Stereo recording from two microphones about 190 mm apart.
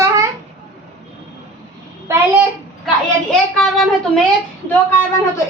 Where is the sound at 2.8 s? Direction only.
Centre (ahead or behind).